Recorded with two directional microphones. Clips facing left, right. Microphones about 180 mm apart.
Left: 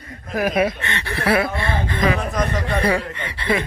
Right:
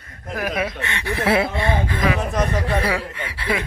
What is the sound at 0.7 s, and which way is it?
Speech, 5° right (ahead or behind).